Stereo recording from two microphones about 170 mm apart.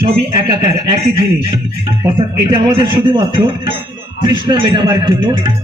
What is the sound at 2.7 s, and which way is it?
Music, 30° right (ahead or behind).